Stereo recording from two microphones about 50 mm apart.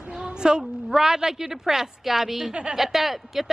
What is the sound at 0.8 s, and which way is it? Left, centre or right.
Speech, centre.